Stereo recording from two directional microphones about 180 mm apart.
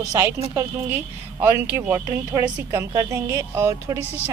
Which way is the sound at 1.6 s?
10° right (ahead or behind).